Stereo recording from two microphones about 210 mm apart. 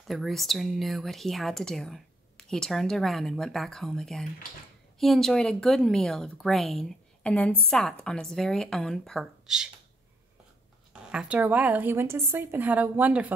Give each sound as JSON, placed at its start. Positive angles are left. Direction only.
{"t": 0.1, "sound": "speech", "side_deg": 0}
{"t": 10.9, "sound": "speech", "side_deg": -5}